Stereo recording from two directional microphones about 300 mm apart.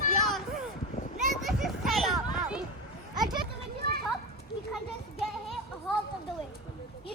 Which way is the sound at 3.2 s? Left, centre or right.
Centre.